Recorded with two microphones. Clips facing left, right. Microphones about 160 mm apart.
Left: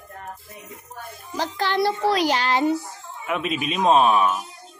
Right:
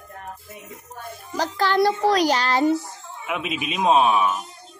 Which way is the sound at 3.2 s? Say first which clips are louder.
Left 2 dB; 5° right (ahead or behind).